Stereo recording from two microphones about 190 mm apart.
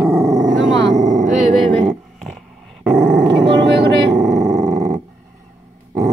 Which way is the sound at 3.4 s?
65° right (ahead or behind).